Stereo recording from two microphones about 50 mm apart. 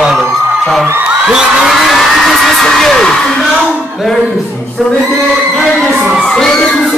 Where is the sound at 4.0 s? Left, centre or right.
Centre.